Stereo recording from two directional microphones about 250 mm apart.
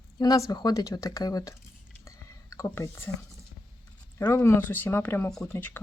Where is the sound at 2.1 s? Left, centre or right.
Centre.